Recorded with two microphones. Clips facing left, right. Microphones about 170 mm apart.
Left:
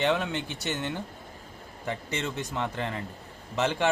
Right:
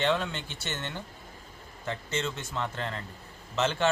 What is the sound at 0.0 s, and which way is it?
A man's voice, 15° left (ahead or behind).